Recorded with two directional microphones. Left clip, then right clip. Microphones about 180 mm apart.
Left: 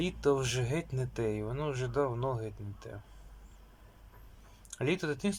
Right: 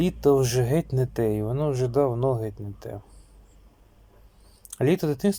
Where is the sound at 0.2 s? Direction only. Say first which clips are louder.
Right 9 dB; 30° right (ahead or behind).